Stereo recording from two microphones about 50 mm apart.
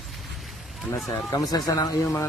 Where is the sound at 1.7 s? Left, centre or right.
Left.